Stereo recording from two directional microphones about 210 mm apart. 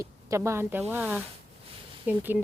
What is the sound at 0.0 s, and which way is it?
A woman's voice, 15° right (ahead or behind).